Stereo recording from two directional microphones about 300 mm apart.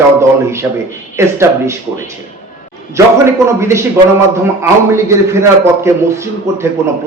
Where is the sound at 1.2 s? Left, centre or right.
Centre.